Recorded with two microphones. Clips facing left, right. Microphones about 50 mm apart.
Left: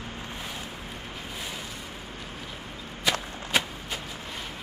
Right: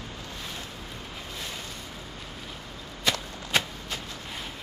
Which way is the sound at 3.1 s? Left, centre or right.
Centre.